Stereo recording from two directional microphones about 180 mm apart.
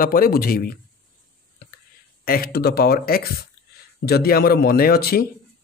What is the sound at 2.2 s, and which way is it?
A man's voice, 55° left (ahead or behind).